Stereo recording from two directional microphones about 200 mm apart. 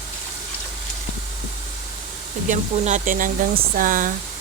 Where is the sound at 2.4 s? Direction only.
40° right (ahead or behind).